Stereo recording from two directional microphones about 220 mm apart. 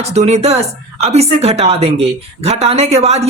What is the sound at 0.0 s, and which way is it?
Speech, 30° right (ahead or behind).